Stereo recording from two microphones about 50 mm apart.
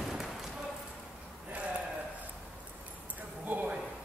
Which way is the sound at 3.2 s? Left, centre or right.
Right.